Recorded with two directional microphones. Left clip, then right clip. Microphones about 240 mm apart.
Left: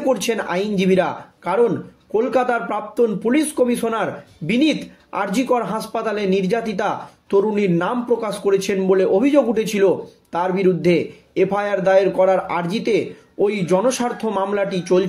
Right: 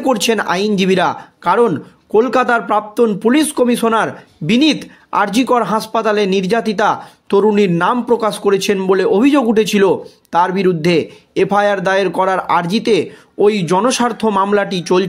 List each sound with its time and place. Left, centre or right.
0.0 s speech: right